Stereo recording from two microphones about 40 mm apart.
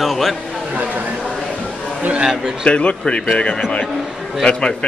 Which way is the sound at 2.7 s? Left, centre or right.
Left.